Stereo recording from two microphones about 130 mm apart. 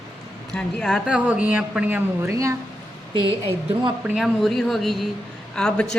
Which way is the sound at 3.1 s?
25° left (ahead or behind).